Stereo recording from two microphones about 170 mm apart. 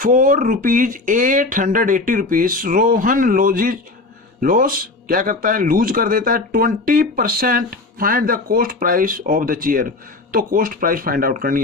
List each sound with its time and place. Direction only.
0.0 s speech: 55° right (ahead or behind)